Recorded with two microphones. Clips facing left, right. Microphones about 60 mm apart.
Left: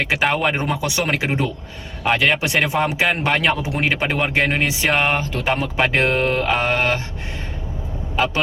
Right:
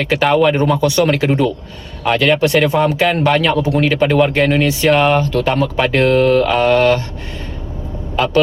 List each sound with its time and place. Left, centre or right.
0.0 s speech: centre
2.0 s a man's voice: centre
2.4 s a man's voice: centre
4.0 s a man's voice: centre
4.9 s a man's voice: centre
5.1 s speech: centre
6.1 s a man's voice: centre
8.1 s speech: centre